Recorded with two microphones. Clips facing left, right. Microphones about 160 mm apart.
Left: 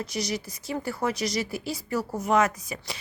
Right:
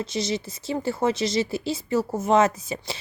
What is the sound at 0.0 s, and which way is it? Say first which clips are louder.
Speech: right 4 dB; 25° right (ahead or behind).